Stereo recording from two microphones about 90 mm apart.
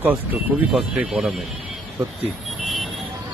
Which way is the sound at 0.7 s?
5° right (ahead or behind).